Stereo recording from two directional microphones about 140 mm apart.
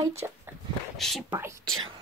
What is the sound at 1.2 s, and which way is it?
Speech, 15° right (ahead or behind).